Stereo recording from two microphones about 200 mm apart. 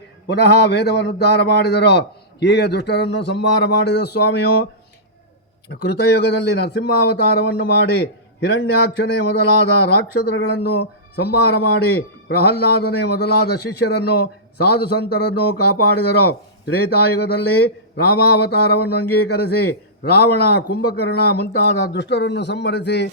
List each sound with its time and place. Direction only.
0.3 s a man's voice: 55° left (ahead or behind)
5.6 s a man's voice: 55° left (ahead or behind)